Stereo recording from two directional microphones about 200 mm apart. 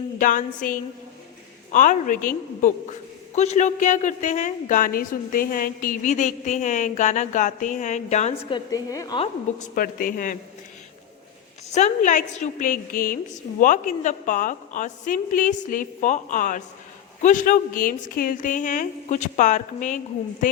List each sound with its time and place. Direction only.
0.2 s a woman's voice: 40° left (ahead or behind); by 9.2 s 20° left (ahead or behind)
9.2 s a woman's voice: 40° left (ahead or behind)
11.7 s a woman's voice: 35° left (ahead or behind)